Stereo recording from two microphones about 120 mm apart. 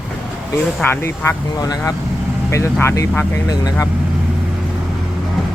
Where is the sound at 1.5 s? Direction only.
30° left (ahead or behind).